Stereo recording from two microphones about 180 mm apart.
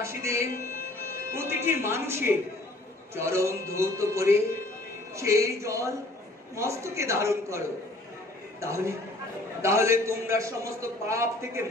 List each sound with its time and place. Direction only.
0.0 s music: 15° right (ahead or behind)
1.3 s a man's voice: 15° right (ahead or behind)